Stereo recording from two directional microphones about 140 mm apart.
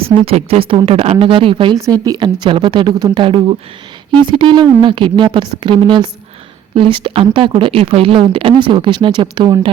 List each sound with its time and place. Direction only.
0.0 s a woman's voice: 45° right (ahead or behind)